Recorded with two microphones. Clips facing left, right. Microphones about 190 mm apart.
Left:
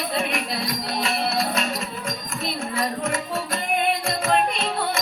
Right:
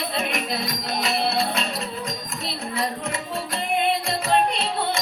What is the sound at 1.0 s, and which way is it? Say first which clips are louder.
Music: right 2 dB; 30° right (ahead or behind).